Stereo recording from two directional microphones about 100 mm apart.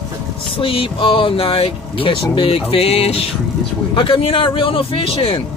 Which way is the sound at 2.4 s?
75° left (ahead or behind).